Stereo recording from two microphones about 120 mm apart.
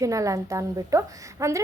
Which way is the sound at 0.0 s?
25° right (ahead or behind).